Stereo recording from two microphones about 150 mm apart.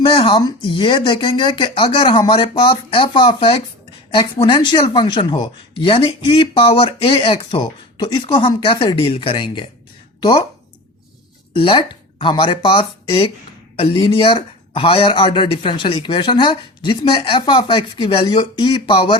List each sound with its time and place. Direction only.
0.0 s speech: 35° left (ahead or behind)
11.5 s speech: 35° left (ahead or behind)